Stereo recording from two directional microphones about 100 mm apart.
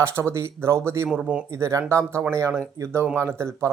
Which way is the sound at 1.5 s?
30° right (ahead or behind).